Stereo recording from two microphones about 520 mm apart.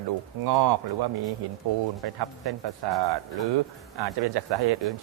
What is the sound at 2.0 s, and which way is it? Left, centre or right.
Speech, right.